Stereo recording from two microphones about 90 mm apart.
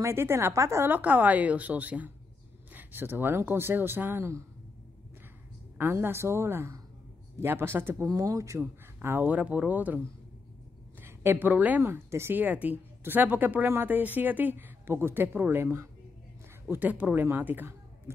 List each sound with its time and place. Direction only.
0.0 s speech: 30° right (ahead or behind)
0.8 s a woman's voice: 20° right (ahead or behind)
5.8 s speech: 25° right (ahead or behind)
8.1 s speech: 40° right (ahead or behind); by 9.9 s 15° right (ahead or behind)
11.0 s a woman's voice: 25° right (ahead or behind)